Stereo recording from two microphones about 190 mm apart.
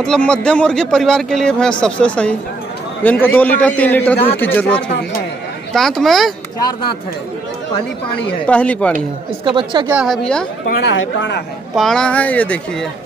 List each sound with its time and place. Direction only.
0.0 s a man's voice: 5° left (ahead or behind)
8.5 s a man's voice: 10° left (ahead or behind)
9.4 s speech: 25° right (ahead or behind)
9.8 s speech: 5° right (ahead or behind)
10.8 s speech: 70° left (ahead or behind)
11.7 s a man's voice: centre (ahead or behind)